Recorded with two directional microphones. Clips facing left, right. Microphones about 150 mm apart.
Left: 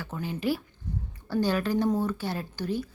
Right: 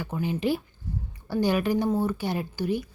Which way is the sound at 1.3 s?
15° right (ahead or behind).